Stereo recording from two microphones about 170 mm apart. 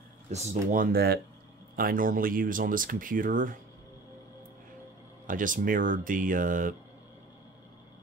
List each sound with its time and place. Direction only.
0.3 s speech: 40° right (ahead or behind); by 1.2 s 70° right (ahead or behind)
1.8 s speech: 55° right (ahead or behind)
5.2 s speech: 50° right (ahead or behind)